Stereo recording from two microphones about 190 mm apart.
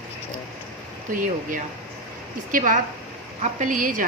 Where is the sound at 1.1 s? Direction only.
45° right (ahead or behind).